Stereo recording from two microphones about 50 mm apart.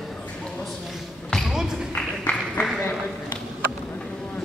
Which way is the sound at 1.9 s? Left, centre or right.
Centre.